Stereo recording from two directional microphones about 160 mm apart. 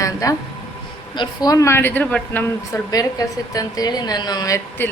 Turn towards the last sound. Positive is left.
turn(degrees=20)  # may be behind; listen again after turning